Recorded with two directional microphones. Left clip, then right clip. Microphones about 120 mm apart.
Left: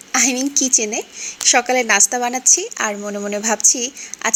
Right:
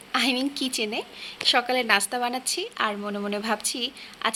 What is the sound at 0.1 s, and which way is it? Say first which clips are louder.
A woman's voice: left 6 dB; 30° left (ahead or behind).